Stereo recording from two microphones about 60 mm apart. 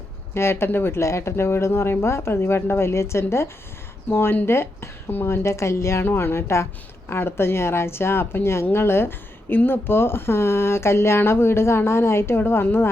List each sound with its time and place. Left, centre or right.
0.3 s speech: left
6.0 s speech: left